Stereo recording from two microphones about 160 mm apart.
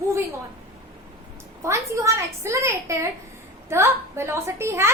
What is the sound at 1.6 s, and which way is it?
A woman's voice, 20° right (ahead or behind).